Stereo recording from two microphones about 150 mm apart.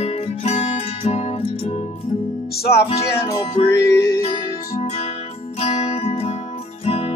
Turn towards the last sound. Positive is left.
turn(degrees=40)  # may be behind; listen again after turning